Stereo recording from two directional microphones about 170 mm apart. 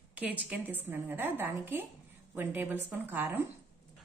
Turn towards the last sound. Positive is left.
turn(degrees=-10)  # may be behind; listen again after turning